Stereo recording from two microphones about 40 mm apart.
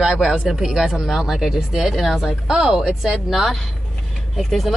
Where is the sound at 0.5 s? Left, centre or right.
Centre.